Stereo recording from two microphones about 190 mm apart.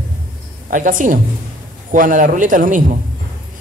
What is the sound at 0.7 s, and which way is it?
A man's voice, 45° right (ahead or behind).